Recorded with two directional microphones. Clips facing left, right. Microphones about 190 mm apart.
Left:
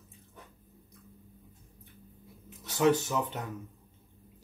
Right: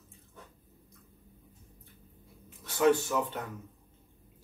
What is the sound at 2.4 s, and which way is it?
Speech, 20° left (ahead or behind).